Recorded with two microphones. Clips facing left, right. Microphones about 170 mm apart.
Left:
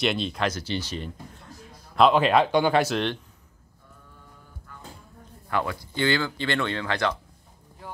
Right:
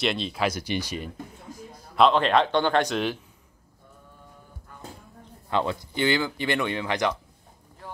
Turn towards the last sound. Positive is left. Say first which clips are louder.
# right 1 dB
turn(degrees=-15)  # may be behind; listen again after turning